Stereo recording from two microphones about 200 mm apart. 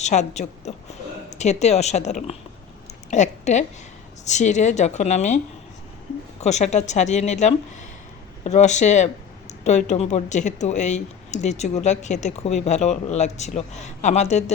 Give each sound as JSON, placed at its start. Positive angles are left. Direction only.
{"t": 0.0, "sound": "a woman's voice", "side_deg": 35}
{"t": 6.4, "sound": "speech", "side_deg": 35}